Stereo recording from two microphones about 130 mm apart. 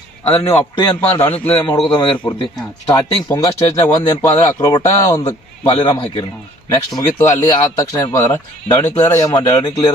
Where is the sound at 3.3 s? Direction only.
30° left (ahead or behind).